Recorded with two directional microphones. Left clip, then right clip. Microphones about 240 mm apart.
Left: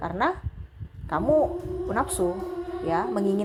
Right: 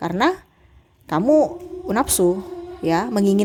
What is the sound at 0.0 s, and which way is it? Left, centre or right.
A woman's voice, right.